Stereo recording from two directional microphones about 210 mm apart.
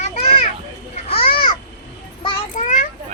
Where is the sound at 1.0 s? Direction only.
25° left (ahead or behind).